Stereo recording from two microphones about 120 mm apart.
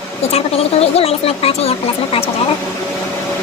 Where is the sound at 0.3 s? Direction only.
55° left (ahead or behind).